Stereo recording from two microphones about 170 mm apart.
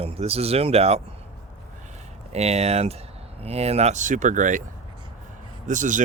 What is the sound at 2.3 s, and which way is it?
Speech, 40° right (ahead or behind).